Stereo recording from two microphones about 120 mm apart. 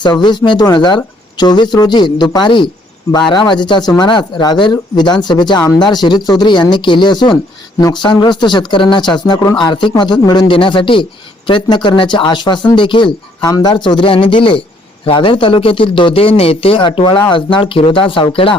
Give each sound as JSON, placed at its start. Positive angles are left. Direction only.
{"t": 0.0, "sound": "speech", "side_deg": 35}
{"t": 13.4, "sound": "speech", "side_deg": 30}